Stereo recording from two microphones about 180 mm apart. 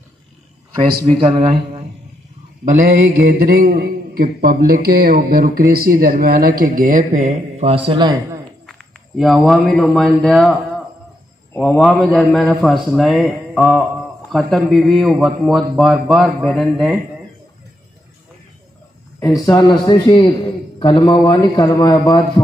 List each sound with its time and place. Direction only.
0.7 s a man's voice: 30° right (ahead or behind)
2.7 s speech: 50° right (ahead or behind); by 8.1 s 30° right (ahead or behind)
9.1 s a man's voice: centre (ahead or behind)
19.1 s a man's voice: 20° left (ahead or behind)